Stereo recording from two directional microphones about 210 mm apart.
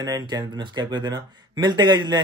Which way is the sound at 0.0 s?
15° right (ahead or behind).